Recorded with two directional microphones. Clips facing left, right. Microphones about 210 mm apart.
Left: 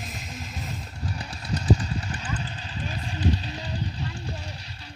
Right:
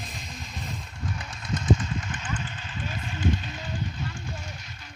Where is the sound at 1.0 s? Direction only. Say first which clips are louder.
Left 1 dB; 35° left (ahead or behind).